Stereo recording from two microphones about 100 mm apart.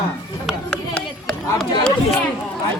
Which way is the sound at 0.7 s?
10° left (ahead or behind).